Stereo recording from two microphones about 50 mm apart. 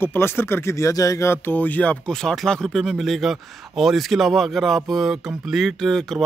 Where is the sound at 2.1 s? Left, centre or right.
Centre.